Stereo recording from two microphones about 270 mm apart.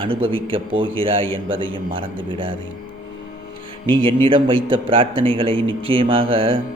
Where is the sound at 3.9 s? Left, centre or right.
Centre.